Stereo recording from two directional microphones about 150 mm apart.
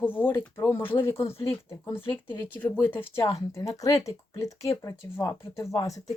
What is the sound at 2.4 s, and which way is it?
Speech, 10° left (ahead or behind).